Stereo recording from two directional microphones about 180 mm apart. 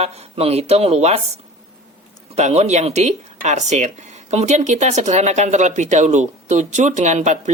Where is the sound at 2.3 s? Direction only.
40° right (ahead or behind).